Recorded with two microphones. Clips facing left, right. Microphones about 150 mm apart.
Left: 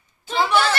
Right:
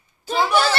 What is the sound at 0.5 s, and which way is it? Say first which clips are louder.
Speech: even; 35° right (ahead or behind).